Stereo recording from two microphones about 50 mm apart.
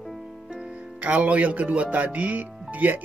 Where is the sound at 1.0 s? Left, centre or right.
Right.